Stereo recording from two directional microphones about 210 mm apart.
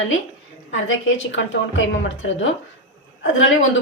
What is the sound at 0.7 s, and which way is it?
A woman's voice, 65° left (ahead or behind).